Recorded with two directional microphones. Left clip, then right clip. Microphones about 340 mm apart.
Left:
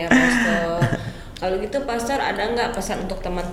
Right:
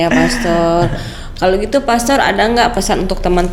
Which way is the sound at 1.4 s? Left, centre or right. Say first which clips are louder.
Right 10 dB; right.